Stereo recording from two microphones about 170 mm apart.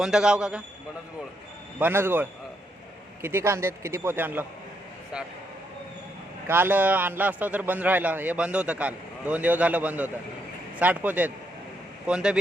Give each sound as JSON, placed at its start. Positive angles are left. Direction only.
{"t": 0.0, "sound": "a man's voice", "side_deg": -5}
{"t": 1.8, "sound": "a man's voice", "side_deg": -15}
{"t": 6.5, "sound": "a man's voice", "side_deg": -10}